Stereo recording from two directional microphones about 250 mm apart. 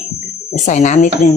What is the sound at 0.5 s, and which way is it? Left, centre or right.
Speech, left.